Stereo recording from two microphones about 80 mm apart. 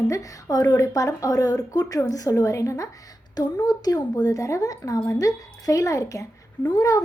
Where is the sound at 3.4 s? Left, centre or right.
Left.